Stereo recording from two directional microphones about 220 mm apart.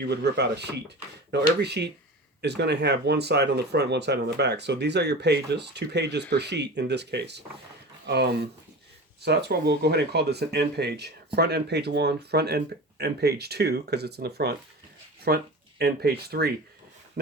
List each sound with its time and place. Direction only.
0.1 s speech: 50° right (ahead or behind)